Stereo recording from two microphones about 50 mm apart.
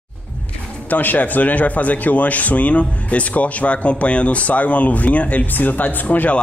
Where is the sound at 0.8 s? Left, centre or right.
Left.